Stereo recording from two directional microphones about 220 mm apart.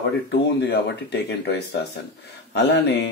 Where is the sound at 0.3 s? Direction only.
50° left (ahead or behind).